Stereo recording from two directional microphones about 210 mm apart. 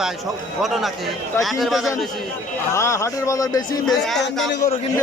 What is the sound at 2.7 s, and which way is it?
A man's voice, 15° left (ahead or behind).